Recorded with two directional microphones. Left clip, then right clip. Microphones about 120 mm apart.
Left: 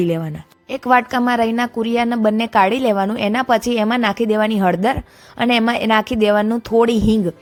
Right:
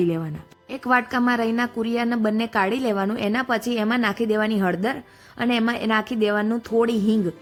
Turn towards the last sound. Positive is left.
turn(degrees=45)  # may be behind; listen again after turning